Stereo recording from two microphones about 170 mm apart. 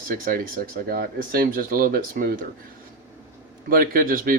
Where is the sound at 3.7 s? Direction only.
60° right (ahead or behind).